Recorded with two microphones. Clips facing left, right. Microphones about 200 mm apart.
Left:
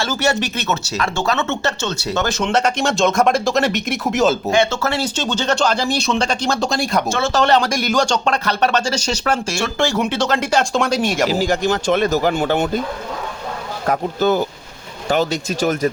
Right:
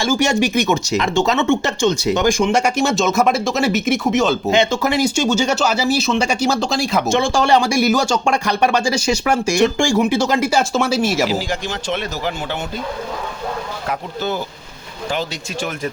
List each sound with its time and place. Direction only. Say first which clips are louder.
0.0 s speech: right 3 dB; 15° right (ahead or behind); by 4.5 s centre (ahead or behind)
4.5 s speech: right 1 dB; 15° right (ahead or behind); by 7.0 s centre (ahead or behind)
7.1 s speech: right 1 dB; 15° right (ahead or behind)
11.3 s speech: left 6 dB; 45° left (ahead or behind)
13.8 s speech: left 8 dB; 45° left (ahead or behind)